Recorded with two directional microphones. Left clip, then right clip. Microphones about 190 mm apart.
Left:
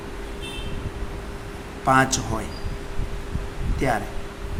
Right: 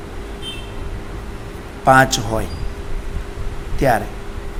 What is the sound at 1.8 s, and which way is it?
Speech, 25° right (ahead or behind).